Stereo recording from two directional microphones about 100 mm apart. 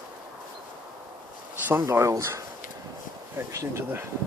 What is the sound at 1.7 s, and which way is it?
Speech, 25° right (ahead or behind).